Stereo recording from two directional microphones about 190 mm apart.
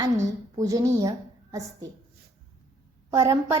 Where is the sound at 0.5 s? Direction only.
15° right (ahead or behind).